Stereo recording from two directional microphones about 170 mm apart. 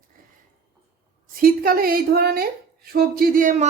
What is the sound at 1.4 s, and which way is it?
A woman's voice, 55° right (ahead or behind).